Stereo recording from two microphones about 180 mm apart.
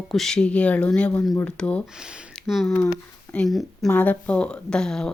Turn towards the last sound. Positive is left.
turn(degrees=5)  # may be behind; listen again after turning